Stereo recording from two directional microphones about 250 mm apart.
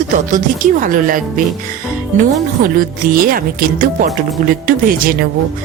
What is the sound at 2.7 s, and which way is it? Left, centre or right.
Speech, right.